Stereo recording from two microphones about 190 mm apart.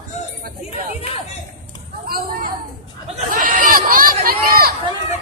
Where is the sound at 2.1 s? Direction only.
50° right (ahead or behind).